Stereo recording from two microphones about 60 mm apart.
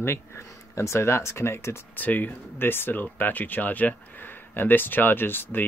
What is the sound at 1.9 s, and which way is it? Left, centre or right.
Speech, left.